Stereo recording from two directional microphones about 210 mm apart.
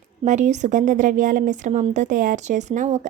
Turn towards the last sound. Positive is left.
turn(degrees=-35)  # may be behind; listen again after turning